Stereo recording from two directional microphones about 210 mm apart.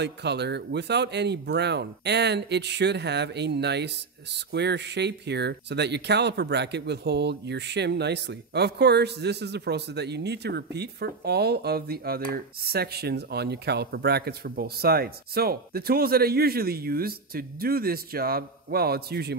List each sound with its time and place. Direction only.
0.0 s speech: 55° right (ahead or behind)